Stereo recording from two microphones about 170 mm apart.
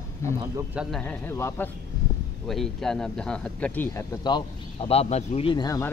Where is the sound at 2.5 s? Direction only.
Centre (ahead or behind).